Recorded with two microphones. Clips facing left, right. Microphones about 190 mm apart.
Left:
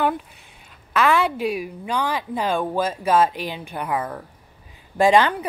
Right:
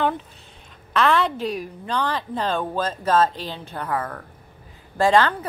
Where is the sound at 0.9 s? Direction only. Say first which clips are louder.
Left 1 dB; 10° left (ahead or behind).